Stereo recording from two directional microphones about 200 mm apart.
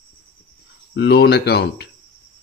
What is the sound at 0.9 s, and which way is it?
Speech, 55° left (ahead or behind).